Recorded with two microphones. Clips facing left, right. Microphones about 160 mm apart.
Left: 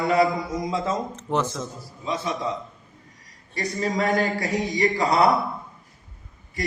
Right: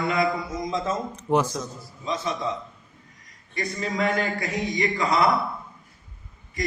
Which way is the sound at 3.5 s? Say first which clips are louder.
Left 2 dB; 35° left (ahead or behind).